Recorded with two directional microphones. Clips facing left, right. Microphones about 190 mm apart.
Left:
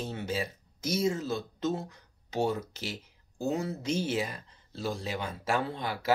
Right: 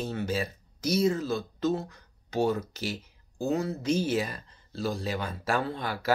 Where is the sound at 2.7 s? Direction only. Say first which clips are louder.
Right 4 dB; 25° left (ahead or behind).